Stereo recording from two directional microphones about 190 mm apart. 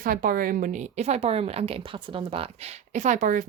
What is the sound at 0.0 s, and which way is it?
A woman's voice, 50° right (ahead or behind).